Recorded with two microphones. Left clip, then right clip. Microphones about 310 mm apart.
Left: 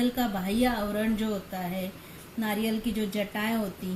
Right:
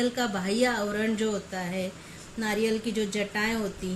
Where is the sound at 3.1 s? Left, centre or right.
Right.